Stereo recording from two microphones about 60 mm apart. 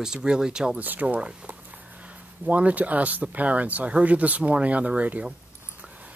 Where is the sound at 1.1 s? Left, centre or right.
Centre.